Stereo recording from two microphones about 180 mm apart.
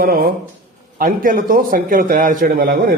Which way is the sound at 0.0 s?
55° right (ahead or behind).